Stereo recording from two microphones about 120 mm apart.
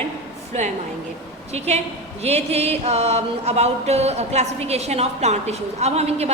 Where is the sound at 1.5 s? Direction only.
60° right (ahead or behind).